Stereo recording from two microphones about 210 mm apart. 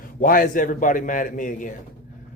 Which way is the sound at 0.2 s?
40° left (ahead or behind).